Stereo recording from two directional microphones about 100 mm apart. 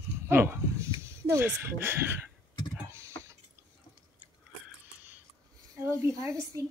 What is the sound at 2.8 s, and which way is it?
Typing, 30° right (ahead or behind).